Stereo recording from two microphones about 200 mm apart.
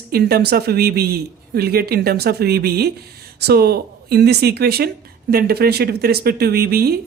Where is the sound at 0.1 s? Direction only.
50° right (ahead or behind).